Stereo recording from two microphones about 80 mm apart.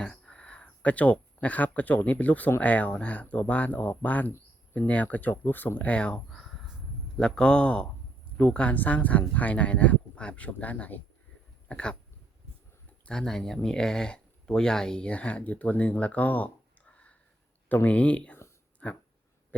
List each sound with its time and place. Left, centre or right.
0.0 s speech: centre
13.1 s speech: centre
18.8 s a sound: centre